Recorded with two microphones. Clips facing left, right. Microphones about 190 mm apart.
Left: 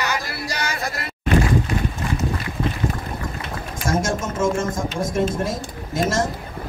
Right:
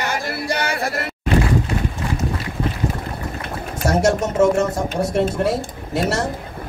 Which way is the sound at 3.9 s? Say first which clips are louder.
Right 5 dB; 70° right (ahead or behind).